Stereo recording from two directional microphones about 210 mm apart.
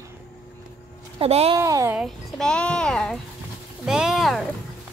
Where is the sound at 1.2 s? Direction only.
30° right (ahead or behind).